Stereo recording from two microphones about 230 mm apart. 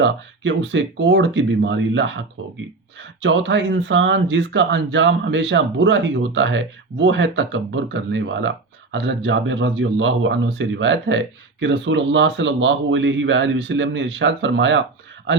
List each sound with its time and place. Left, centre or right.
0.0 s speech: right